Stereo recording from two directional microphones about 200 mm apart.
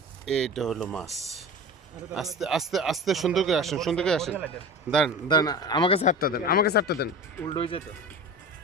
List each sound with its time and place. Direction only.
0.3 s speech: 5° left (ahead or behind)
5.3 s speech: 20° left (ahead or behind); by 7.1 s 55° left (ahead or behind)
7.5 s speech: 25° left (ahead or behind)